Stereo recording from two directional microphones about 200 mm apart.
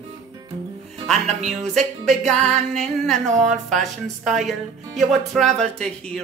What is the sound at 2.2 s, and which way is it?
Music, centre (ahead or behind).